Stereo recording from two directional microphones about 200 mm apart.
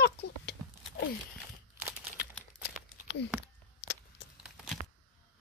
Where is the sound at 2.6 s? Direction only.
60° left (ahead or behind).